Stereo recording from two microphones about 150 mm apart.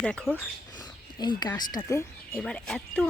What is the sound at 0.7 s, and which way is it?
Speech, 30° left (ahead or behind).